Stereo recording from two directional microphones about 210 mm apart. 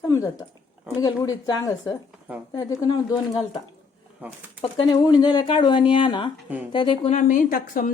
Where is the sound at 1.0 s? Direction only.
20° left (ahead or behind).